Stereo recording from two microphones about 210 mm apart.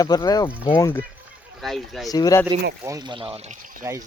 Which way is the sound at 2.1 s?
15° left (ahead or behind).